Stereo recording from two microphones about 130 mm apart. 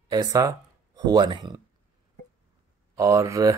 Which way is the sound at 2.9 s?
20° right (ahead or behind).